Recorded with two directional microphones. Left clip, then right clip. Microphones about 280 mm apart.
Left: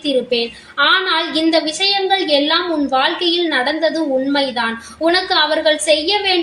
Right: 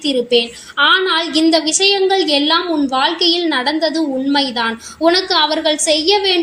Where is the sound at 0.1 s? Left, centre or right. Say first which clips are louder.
Right 2 dB; right.